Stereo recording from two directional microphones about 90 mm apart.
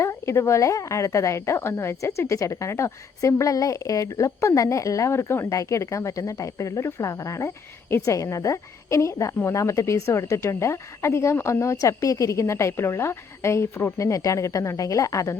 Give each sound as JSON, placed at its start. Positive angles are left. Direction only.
{"t": 0.0, "sound": "a woman's voice", "side_deg": 30}